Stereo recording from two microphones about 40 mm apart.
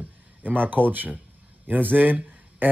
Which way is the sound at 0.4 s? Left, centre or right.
Right.